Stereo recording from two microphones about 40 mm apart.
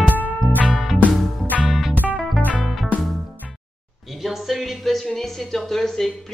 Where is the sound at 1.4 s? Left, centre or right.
Right.